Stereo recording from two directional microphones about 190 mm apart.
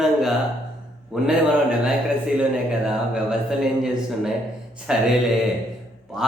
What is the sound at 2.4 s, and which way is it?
A man's voice, 5° right (ahead or behind).